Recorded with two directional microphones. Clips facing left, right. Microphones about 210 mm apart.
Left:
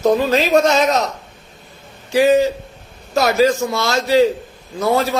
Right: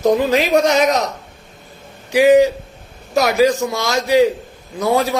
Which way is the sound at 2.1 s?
15° right (ahead or behind).